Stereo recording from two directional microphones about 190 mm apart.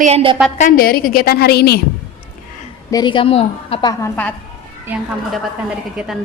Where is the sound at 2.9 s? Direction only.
20° left (ahead or behind).